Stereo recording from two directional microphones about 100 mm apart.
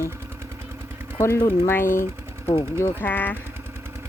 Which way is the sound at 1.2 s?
30° left (ahead or behind).